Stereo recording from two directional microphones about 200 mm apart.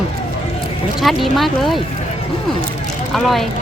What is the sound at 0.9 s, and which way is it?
Speech, centre (ahead or behind).